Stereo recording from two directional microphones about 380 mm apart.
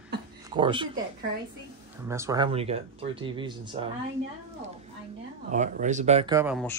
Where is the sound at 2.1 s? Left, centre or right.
Centre.